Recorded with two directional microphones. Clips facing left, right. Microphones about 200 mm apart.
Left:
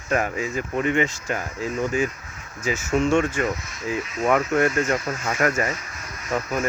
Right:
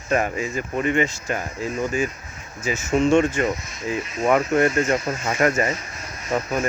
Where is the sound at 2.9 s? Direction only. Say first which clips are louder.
Right 3 dB; 25° right (ahead or behind).